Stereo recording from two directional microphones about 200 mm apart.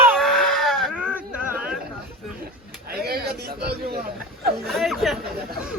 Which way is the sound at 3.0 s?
50° right (ahead or behind).